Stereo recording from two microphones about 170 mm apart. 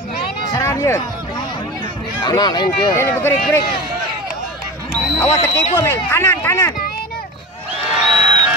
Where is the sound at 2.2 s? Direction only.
25° left (ahead or behind).